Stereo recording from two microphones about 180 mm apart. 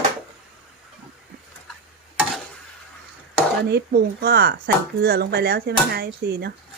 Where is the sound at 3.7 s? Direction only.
65° right (ahead or behind).